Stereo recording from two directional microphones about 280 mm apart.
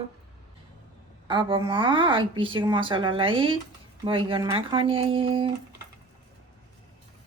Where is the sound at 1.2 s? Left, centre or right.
Centre.